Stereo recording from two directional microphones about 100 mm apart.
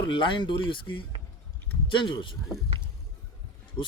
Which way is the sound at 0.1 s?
55° left (ahead or behind).